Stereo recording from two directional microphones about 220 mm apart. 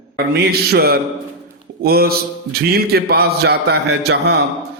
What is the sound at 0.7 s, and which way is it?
A man's voice, 45° right (ahead or behind).